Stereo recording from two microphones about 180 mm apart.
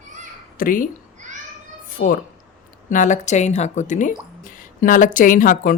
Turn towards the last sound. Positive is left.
turn(degrees=50)  # may be behind; listen again after turning